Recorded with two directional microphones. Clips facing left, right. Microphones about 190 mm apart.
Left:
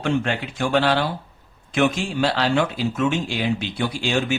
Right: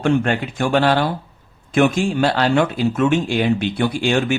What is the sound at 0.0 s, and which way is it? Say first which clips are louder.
Speech: right 5 dB; 50° right (ahead or behind).